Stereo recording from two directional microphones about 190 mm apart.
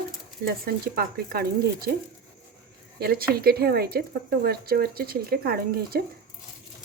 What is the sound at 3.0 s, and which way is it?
Speech, 50° right (ahead or behind).